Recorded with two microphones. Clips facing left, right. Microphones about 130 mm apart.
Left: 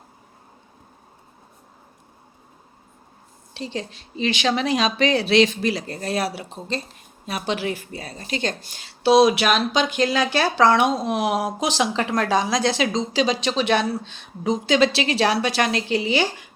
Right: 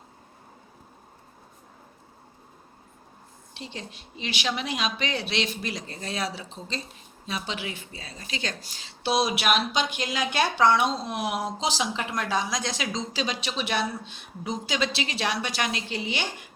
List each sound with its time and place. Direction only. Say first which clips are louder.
4.1 s speech: left 9 dB; 90° left; by 7.8 s 65° left (ahead or behind)
8.3 s speech: left 8 dB; 45° left (ahead or behind); by 9.5 s 90° left
9.6 s speech: left 5 dB; 5° right (ahead or behind)
10.0 s speech: left 7 dB; 70° left (ahead or behind)
10.6 s speech: left 5 dB; 90° left
12.5 s speech: left 9 dB; 80° left
13.1 s speech: left 11 dB; 90° left
14.7 s speech: left 10 dB; 75° left (ahead or behind)